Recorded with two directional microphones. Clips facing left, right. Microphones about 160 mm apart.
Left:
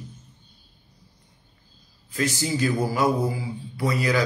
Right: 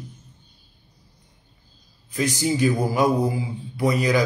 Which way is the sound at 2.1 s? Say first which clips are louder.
Right 3 dB; 15° right (ahead or behind).